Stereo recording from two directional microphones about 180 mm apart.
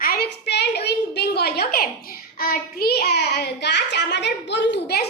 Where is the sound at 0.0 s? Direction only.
60° left (ahead or behind).